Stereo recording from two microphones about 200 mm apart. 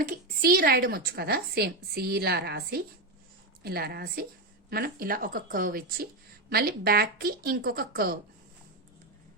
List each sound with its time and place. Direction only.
0.0 s a woman's voice: 45° right (ahead or behind)